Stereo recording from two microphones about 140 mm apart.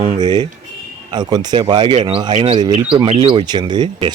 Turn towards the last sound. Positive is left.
turn(degrees=-35)  # may be behind; listen again after turning